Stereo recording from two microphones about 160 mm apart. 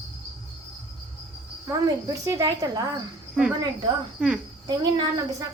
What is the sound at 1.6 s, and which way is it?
Speech, 20° right (ahead or behind).